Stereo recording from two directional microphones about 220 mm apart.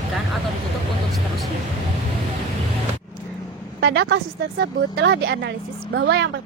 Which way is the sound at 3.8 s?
50° right (ahead or behind).